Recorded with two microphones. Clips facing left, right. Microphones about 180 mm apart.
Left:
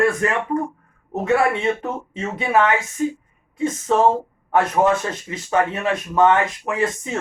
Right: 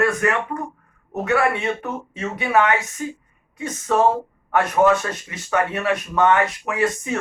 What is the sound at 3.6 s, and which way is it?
Speech, 25° left (ahead or behind).